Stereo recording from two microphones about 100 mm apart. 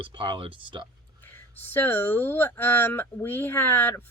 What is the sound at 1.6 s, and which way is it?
Speech, 20° left (ahead or behind).